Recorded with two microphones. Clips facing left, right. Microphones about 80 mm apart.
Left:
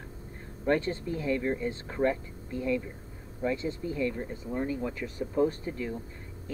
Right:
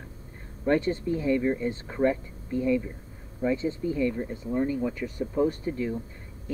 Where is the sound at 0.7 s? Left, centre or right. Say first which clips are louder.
Right 3 dB; centre.